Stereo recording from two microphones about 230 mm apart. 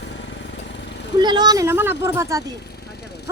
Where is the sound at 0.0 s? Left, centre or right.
Left.